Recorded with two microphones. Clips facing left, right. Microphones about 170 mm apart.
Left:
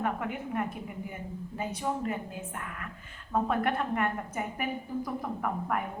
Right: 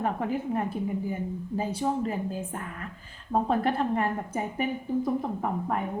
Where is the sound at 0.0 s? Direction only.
30° right (ahead or behind).